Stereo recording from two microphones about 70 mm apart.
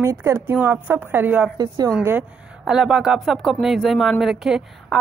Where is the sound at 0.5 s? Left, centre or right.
Right.